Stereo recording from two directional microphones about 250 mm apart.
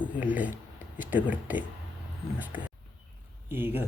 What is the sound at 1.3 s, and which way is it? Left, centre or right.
Speech, centre.